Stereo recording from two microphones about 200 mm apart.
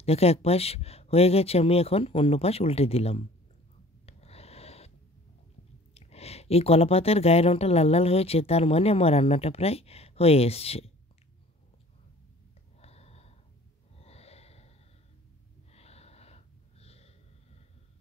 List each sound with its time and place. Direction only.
0.0 s speech: 30° left (ahead or behind)
4.0 s rub: 30° left (ahead or behind)
5.9 s speech: 30° left (ahead or behind)
12.8 s a sound: 30° left (ahead or behind)
13.9 s wheeze: 30° left (ahead or behind)
15.7 s gasp: 30° left (ahead or behind)